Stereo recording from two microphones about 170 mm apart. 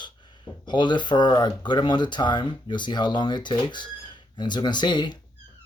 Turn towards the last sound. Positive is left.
turn(degrees=25)  # may be behind; listen again after turning